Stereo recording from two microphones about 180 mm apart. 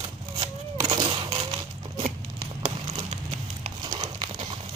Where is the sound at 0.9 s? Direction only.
25° right (ahead or behind).